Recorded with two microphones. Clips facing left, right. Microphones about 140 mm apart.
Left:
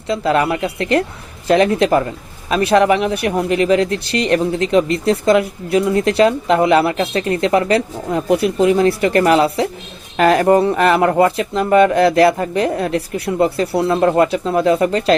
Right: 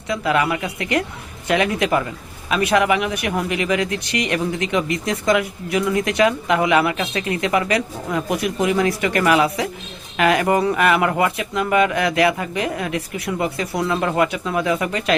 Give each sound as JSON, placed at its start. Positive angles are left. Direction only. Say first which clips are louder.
{"t": 0.1, "sound": "speech", "louder": "left 4 dB", "side_deg": 30}